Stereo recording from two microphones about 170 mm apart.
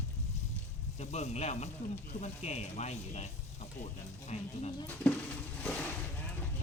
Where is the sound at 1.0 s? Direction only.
40° left (ahead or behind).